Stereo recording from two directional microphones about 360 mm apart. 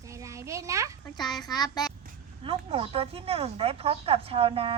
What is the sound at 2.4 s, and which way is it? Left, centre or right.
Speech, centre.